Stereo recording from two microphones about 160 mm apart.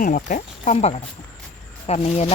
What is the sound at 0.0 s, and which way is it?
Speech, 55° left (ahead or behind).